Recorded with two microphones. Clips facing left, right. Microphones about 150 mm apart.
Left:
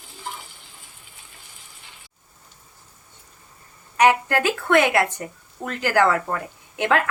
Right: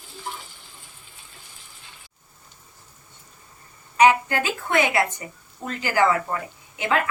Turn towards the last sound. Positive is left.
turn(degrees=60)  # may be behind; listen again after turning